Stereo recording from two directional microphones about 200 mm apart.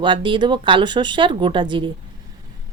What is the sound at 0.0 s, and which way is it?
Speech, 25° right (ahead or behind).